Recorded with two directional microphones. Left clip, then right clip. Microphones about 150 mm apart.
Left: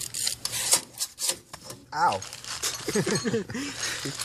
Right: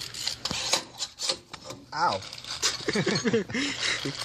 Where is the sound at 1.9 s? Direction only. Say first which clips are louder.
Left 2 dB; 30° left (ahead or behind).